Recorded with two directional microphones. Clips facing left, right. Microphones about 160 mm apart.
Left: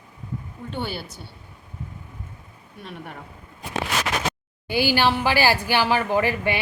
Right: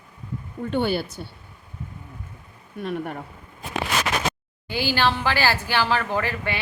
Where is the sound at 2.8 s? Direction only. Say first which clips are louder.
Right 9 dB; 55° right (ahead or behind).